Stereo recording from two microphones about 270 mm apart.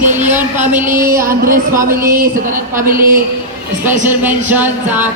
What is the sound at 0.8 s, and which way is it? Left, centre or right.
Speech, right.